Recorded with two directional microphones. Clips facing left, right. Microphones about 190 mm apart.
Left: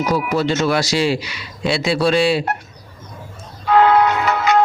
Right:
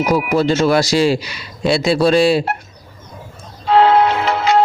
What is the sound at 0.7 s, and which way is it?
Speech, 40° right (ahead or behind).